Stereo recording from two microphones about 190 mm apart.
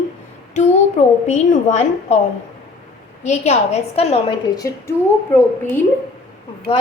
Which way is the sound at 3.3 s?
35° left (ahead or behind).